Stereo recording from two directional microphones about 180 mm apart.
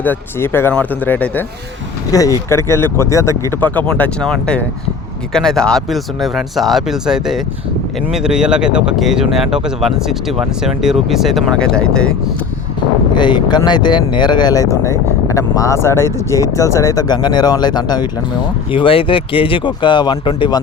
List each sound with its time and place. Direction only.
0.0 s speech: 10° left (ahead or behind)
13.1 s speech: 25° left (ahead or behind)